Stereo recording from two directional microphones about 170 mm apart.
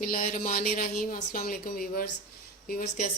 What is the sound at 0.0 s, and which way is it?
A woman's voice, 55° left (ahead or behind).